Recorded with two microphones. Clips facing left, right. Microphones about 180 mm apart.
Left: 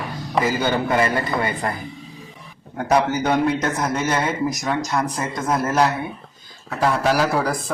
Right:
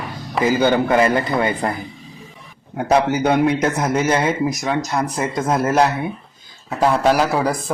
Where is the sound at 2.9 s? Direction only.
25° right (ahead or behind).